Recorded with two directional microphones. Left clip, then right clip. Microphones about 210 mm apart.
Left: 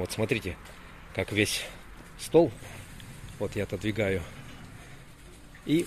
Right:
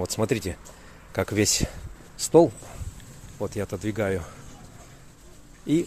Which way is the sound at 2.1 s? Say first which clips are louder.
Right 5 dB; 25° right (ahead or behind).